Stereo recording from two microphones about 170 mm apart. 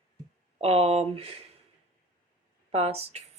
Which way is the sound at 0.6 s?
35° right (ahead or behind).